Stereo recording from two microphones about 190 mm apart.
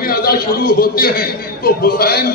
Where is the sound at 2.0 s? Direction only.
55° left (ahead or behind).